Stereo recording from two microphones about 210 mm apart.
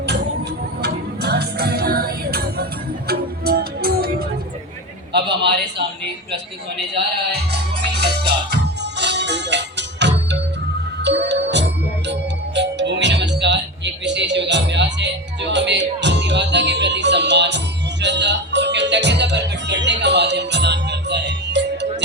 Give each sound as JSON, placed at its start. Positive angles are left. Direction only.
{"t": 0.8, "sound": "music", "side_deg": -50}
{"t": 5.1, "sound": "a man's voice", "side_deg": -55}
{"t": 6.9, "sound": "music", "side_deg": -50}